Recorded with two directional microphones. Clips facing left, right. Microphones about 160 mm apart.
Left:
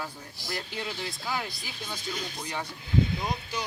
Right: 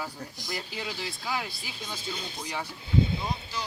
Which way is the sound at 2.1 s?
25° right (ahead or behind).